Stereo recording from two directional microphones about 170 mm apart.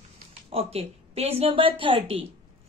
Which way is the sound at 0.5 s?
35° right (ahead or behind).